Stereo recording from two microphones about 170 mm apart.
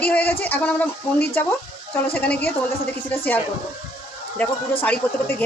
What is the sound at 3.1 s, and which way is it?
A man's voice, 10° left (ahead or behind).